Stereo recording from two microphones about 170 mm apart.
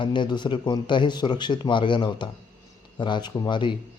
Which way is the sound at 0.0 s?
30° left (ahead or behind).